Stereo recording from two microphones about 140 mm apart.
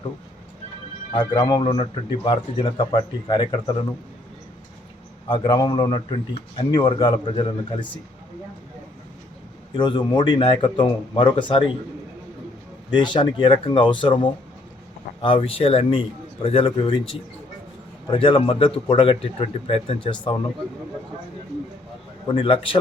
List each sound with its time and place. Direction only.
1.1 s a man's voice: 35° left (ahead or behind)
5.3 s a man's voice: 35° left (ahead or behind)
9.7 s a man's voice: 35° left (ahead or behind)
12.9 s a man's voice: 35° left (ahead or behind)
18.1 s a man's voice: 40° left (ahead or behind)
22.4 s a man's voice: 35° left (ahead or behind)